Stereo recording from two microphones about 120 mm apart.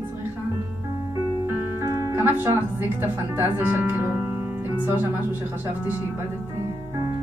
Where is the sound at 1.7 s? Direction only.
20° right (ahead or behind).